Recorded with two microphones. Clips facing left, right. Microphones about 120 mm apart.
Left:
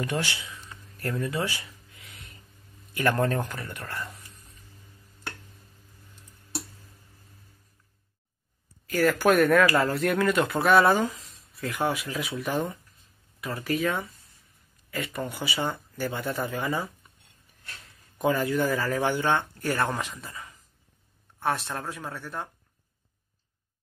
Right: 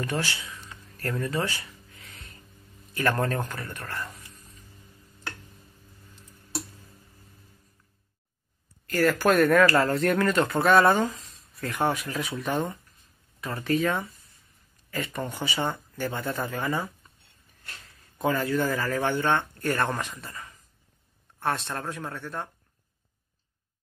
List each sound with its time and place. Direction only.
0.0 s speech: 15° left (ahead or behind)
1.1 s a sound: 10° left (ahead or behind)
2.9 s speech: 15° left (ahead or behind)
8.8 s speech: centre (ahead or behind)
18.1 s speech: 15° left (ahead or behind)